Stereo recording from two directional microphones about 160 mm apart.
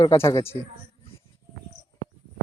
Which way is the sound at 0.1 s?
20° left (ahead or behind).